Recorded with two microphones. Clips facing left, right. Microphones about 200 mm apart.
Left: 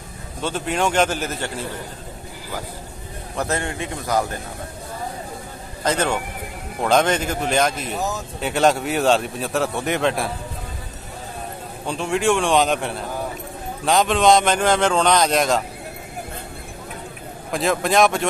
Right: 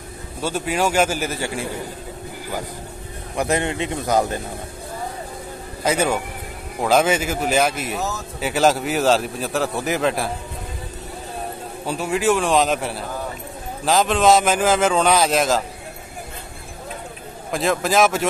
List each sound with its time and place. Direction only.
0.4 s a man's voice: 10° right (ahead or behind)
3.3 s a man's voice: 15° right (ahead or behind)
5.9 s a man's voice: 10° right (ahead or behind)
11.8 s a man's voice: 5° right (ahead or behind)
17.5 s a man's voice: centre (ahead or behind)